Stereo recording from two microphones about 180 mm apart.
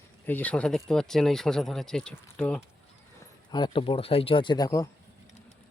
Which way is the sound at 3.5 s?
25° left (ahead or behind).